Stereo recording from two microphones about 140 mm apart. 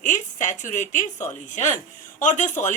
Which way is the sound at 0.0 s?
60° left (ahead or behind).